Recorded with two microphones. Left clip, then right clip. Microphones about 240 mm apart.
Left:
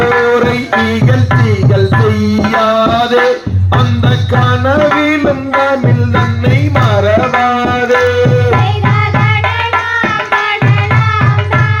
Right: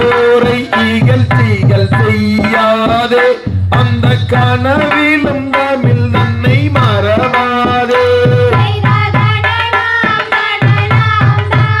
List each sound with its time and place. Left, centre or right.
0.0 s music: right
6.7 s tabla: right
9.7 s tabla: right